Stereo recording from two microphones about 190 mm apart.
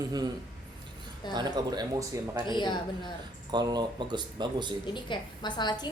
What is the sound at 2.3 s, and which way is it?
Speech, 25° left (ahead or behind).